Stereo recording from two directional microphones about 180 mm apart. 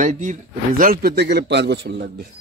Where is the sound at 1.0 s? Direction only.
65° right (ahead or behind).